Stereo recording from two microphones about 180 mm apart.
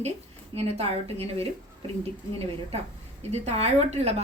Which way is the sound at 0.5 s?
35° right (ahead or behind).